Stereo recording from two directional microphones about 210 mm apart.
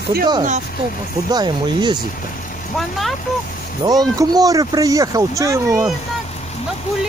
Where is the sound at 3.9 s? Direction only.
15° right (ahead or behind).